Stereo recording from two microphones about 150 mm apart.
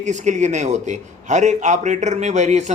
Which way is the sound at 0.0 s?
50° right (ahead or behind).